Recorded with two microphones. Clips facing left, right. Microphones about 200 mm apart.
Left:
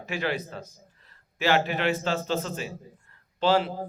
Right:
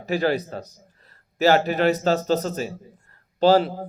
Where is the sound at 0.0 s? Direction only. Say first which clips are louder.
Right 7 dB; 35° right (ahead or behind).